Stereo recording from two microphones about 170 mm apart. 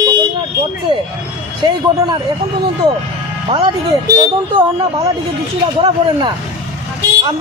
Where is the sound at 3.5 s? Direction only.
20° right (ahead or behind).